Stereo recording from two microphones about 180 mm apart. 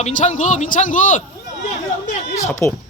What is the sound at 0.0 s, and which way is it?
Speech, 40° left (ahead or behind).